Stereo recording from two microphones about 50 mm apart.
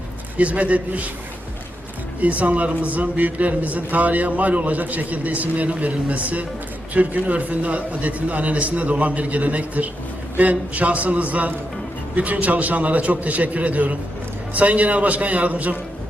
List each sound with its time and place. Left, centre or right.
0.3 s a man's voice: right
2.2 s a man's voice: right